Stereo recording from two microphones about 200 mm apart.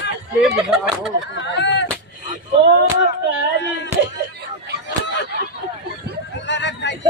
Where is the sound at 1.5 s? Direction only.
60° left (ahead or behind).